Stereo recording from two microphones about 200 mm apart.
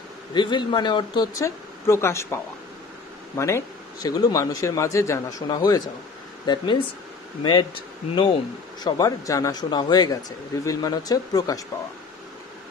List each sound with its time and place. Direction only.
0.3 s speech: 25° left (ahead or behind)
8.1 s speech: 25° left (ahead or behind)